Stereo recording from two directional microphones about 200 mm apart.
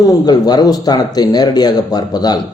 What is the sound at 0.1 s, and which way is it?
Speech, 20° left (ahead or behind).